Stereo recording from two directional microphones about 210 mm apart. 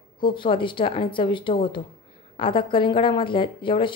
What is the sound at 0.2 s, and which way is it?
Speech, 25° left (ahead or behind).